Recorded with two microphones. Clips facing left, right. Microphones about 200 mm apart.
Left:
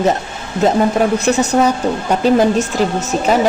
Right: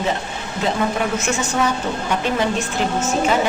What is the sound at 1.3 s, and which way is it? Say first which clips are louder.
A woman's voice: left 7 dB; 40° left (ahead or behind).